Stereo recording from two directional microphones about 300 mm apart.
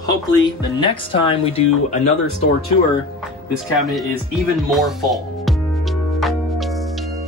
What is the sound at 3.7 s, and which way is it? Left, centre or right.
Speech, centre.